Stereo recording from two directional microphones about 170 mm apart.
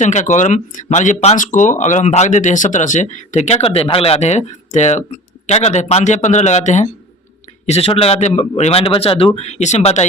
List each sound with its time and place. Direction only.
0.0 s a man's voice: 45° left (ahead or behind)